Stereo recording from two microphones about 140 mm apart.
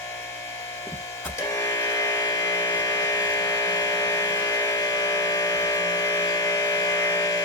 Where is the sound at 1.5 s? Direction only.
25° left (ahead or behind).